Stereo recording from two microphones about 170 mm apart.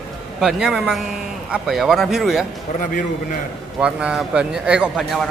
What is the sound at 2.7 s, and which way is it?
Speech, 50° left (ahead or behind).